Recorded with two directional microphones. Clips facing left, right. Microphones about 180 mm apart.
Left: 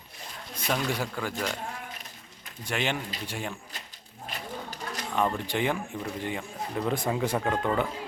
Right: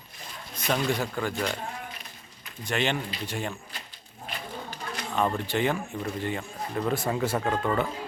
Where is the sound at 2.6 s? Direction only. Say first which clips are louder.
Right 2 dB; 10° left (ahead or behind).